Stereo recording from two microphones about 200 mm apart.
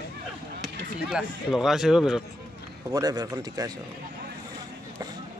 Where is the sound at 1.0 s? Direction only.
Centre (ahead or behind).